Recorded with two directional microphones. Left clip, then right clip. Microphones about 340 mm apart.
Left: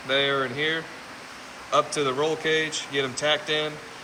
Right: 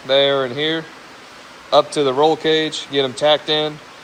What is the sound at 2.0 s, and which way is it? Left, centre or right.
Speech, centre.